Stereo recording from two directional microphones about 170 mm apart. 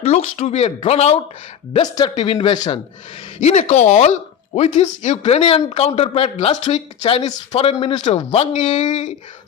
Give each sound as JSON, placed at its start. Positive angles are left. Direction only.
{"t": 0.0, "sound": "speech", "side_deg": 40}
{"t": 1.8, "sound": "speech", "side_deg": 25}
{"t": 3.4, "sound": "speech", "side_deg": 45}